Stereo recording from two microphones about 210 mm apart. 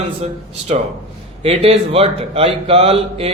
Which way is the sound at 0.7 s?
30° right (ahead or behind).